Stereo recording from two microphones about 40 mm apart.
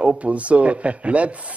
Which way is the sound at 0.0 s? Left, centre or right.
Right.